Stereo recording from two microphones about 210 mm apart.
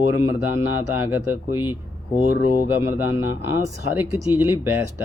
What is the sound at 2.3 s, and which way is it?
Speech, 45° left (ahead or behind).